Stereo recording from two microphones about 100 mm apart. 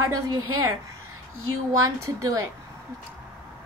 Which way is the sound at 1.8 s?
35° right (ahead or behind).